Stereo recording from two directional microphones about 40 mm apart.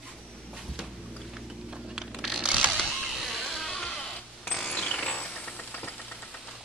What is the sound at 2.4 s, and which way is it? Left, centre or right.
Creak, centre.